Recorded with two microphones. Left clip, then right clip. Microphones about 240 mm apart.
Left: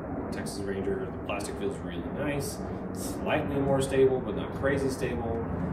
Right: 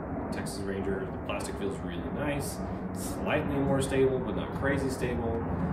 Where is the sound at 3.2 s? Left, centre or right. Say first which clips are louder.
Left 1 dB; centre.